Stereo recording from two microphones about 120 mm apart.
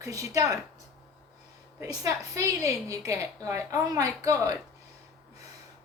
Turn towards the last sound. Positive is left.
turn(degrees=-30)  # may be behind; listen again after turning